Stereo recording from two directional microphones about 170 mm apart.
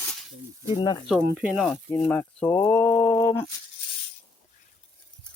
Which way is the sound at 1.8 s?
10° left (ahead or behind).